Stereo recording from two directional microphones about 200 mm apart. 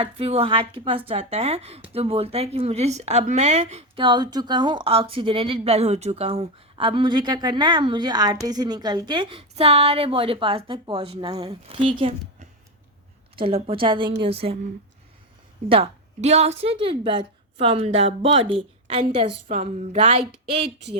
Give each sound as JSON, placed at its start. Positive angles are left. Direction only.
{"t": 0.0, "sound": "speech", "side_deg": -30}
{"t": 13.3, "sound": "speech", "side_deg": -25}
{"t": 15.7, "sound": "a woman's voice", "side_deg": -30}